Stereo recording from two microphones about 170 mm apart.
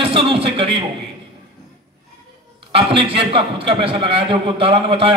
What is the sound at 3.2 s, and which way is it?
A man's voice, 30° right (ahead or behind).